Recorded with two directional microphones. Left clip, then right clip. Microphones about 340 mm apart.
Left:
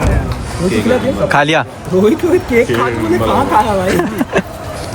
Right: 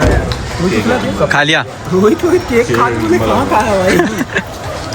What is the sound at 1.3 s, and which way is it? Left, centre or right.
Speech, centre.